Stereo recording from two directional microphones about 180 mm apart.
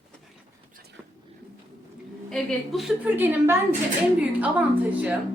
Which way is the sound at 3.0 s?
10° right (ahead or behind).